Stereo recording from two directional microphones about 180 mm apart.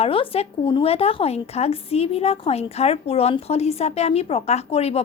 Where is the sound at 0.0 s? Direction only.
30° left (ahead or behind).